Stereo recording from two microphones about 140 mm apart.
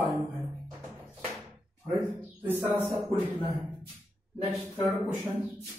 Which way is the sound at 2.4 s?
15° right (ahead or behind).